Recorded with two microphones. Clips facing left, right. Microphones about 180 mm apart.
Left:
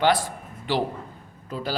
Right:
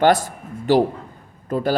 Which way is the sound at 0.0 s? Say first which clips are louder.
Right 5 dB; 45° right (ahead or behind).